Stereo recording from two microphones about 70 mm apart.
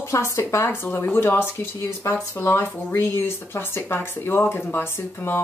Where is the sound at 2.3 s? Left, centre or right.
Left.